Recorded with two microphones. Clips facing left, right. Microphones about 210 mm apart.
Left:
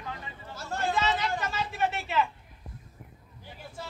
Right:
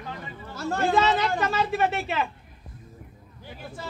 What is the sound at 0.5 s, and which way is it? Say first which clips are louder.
Speech: right 7 dB; 80° right.